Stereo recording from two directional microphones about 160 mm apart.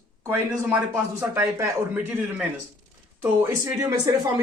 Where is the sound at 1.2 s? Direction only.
15° right (ahead or behind).